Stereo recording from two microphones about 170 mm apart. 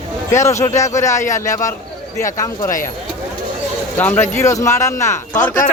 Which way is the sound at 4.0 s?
10° left (ahead or behind).